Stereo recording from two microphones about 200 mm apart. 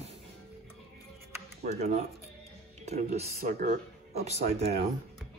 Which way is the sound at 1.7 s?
35° right (ahead or behind).